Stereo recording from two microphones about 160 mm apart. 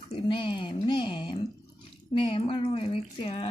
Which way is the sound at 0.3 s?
30° left (ahead or behind).